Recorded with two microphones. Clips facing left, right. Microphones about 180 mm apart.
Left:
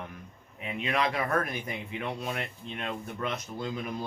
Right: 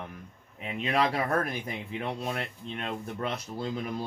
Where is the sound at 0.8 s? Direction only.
35° right (ahead or behind).